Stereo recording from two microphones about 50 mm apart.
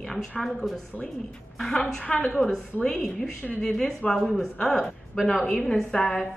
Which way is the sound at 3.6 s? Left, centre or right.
Centre.